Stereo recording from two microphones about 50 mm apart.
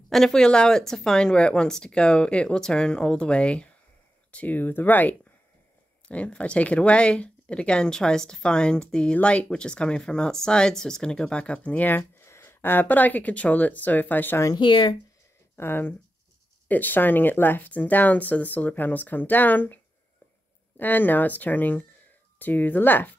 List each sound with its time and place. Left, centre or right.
0.1 s speech: centre; by 5.1 s left
6.0 s speech: left
12.0 s speech: left
15.5 s speech: left
16.6 s speech: left